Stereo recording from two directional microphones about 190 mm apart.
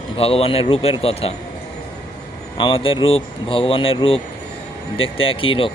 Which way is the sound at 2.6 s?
25° left (ahead or behind).